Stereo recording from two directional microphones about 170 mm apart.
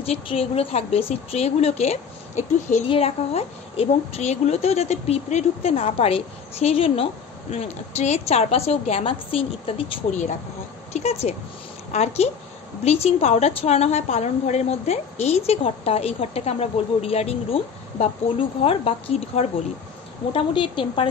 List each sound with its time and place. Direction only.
0.0 s a woman's voice: 35° left (ahead or behind)